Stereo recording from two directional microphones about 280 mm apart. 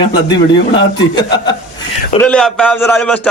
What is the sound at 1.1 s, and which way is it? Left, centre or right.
Speech, centre.